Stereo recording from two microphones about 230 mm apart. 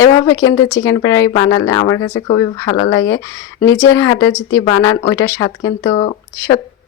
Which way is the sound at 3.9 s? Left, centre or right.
Centre.